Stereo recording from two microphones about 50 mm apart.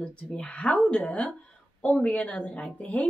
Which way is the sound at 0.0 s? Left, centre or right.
Left.